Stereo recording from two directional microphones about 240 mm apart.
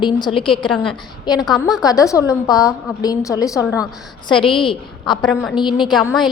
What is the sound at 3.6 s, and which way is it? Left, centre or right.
Speech, centre.